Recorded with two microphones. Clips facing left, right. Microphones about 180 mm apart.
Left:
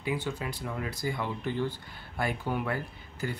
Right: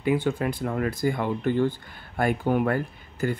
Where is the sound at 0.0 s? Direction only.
55° right (ahead or behind).